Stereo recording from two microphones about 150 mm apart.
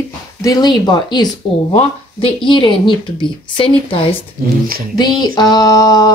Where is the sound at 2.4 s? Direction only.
30° left (ahead or behind).